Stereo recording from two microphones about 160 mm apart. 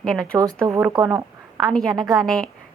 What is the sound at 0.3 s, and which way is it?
Speech, 20° right (ahead or behind).